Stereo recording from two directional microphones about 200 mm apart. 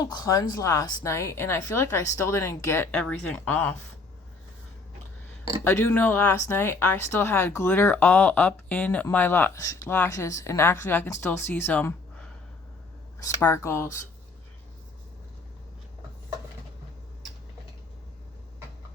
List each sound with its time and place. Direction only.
0.0 s speech: 20° left (ahead or behind)
5.6 s speech: 10° left (ahead or behind)